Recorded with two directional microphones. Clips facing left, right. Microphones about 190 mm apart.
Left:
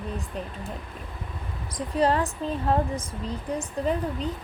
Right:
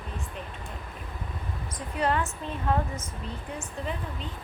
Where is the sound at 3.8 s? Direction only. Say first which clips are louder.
Left 8 dB; 40° left (ahead or behind).